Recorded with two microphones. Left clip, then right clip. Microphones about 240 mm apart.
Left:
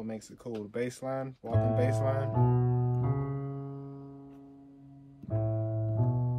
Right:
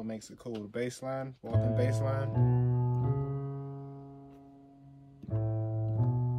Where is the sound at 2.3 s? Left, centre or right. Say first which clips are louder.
Left 4 dB; left.